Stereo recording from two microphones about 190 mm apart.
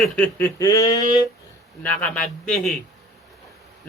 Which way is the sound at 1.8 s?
10° left (ahead or behind).